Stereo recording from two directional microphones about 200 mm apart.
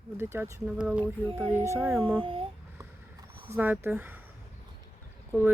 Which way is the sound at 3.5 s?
10° right (ahead or behind).